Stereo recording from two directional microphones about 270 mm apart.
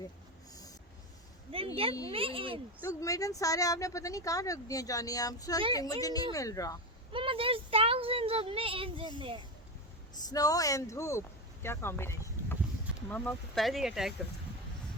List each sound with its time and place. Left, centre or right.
1.5 s speech: right
2.8 s speech: centre
7.1 s speech: centre
10.2 s speech: centre
11.6 s a sound: centre
13.1 s speech: centre